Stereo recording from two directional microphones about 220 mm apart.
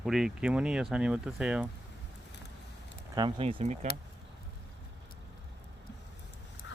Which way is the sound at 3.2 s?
25° right (ahead or behind).